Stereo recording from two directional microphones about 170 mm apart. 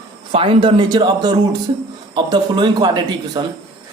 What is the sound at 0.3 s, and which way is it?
Speech, 35° right (ahead or behind).